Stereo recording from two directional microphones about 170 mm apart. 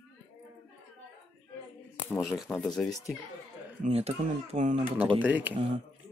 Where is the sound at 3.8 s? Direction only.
40° right (ahead or behind).